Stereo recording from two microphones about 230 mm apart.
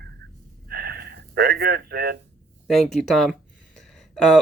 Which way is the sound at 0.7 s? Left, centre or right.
Right.